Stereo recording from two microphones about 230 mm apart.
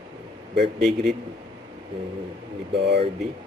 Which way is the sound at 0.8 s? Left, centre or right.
Centre.